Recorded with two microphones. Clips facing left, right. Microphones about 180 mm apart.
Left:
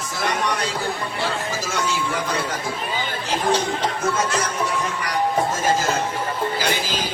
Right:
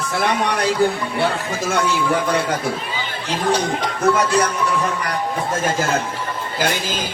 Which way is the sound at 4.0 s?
65° right (ahead or behind).